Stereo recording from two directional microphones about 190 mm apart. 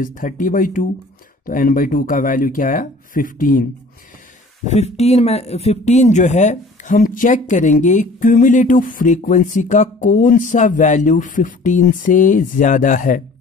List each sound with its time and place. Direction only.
0.0 s speech: 45° left (ahead or behind)
4.6 s speech: 35° left (ahead or behind)